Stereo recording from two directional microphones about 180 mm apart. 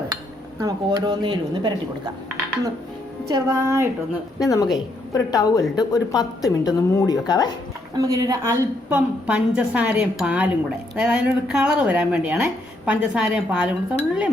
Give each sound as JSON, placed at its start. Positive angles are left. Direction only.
{"t": 0.6, "sound": "a woman's voice", "side_deg": -25}
{"t": 3.2, "sound": "a woman's voice", "side_deg": -15}
{"t": 4.4, "sound": "a woman's voice", "side_deg": 20}
{"t": 7.9, "sound": "a woman's voice", "side_deg": -20}